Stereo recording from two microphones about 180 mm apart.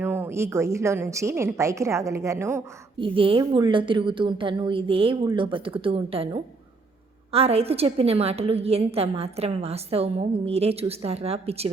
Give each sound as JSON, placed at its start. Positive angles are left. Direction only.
{"t": 0.0, "sound": "a woman's voice", "side_deg": -10}
{"t": 3.0, "sound": "a woman's voice", "side_deg": -30}